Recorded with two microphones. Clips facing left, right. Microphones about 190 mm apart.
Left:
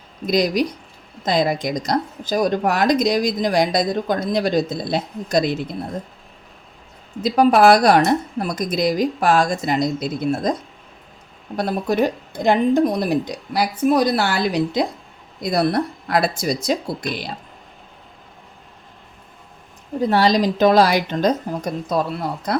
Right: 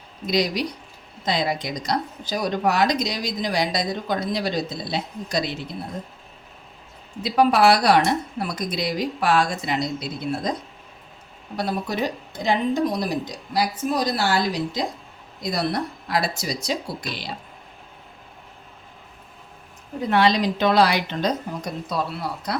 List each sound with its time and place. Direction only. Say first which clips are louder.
0.3 s speech: left 5 dB; 50° left (ahead or behind)
7.2 s speech: left 4 dB; 45° left (ahead or behind)
11.5 s speech: left 6 dB; 50° left (ahead or behind)
20.0 s speech: left 3 dB; 40° left (ahead or behind)